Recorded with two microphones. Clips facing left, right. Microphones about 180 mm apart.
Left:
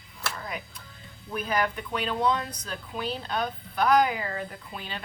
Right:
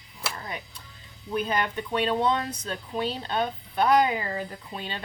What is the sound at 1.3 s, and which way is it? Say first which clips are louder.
Speech: right 1 dB; 30° right (ahead or behind).